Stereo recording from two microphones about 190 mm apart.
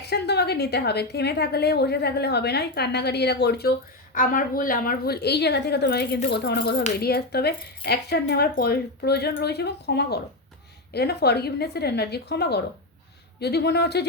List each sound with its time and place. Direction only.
0.0 s a woman's voice: 60° left (ahead or behind)
4.1 s a woman's voice: 45° left (ahead or behind); by 14.1 s 60° left (ahead or behind)